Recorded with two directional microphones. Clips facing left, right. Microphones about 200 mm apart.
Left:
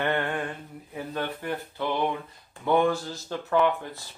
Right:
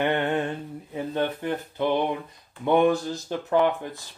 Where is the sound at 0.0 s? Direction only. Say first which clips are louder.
Right 3 dB; 20° right (ahead or behind).